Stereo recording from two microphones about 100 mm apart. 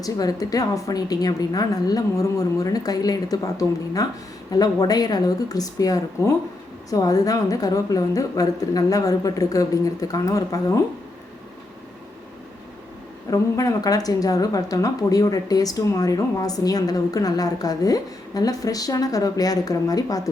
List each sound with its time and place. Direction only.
0.0 s speech: 40° left (ahead or behind)
13.3 s speech: 35° left (ahead or behind)